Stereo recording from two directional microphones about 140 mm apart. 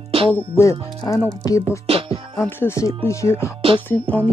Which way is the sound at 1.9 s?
40° right (ahead or behind).